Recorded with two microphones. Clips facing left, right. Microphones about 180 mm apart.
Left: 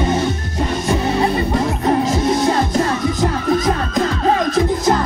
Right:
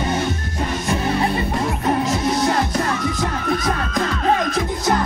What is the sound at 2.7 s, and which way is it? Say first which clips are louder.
Music: left 4 dB; 20° left (ahead or behind).